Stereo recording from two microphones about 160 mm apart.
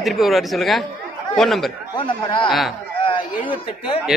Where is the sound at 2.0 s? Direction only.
30° left (ahead or behind).